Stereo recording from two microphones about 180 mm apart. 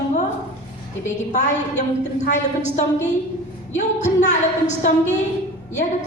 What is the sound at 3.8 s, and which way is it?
A woman's voice, 40° left (ahead or behind).